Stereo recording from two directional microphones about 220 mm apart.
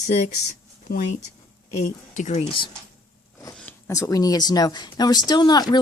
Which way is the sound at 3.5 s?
10° left (ahead or behind).